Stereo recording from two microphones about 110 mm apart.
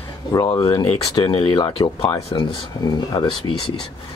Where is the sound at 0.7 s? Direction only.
50° left (ahead or behind).